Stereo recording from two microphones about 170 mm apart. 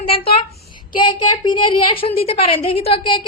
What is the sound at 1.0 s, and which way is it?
A woman's voice, 25° left (ahead or behind).